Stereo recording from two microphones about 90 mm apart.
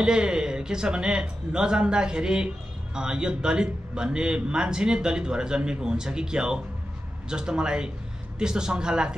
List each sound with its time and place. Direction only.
0.0 s speech: 10° right (ahead or behind)